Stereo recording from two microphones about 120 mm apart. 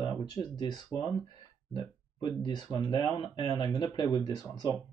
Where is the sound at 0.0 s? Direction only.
35° left (ahead or behind).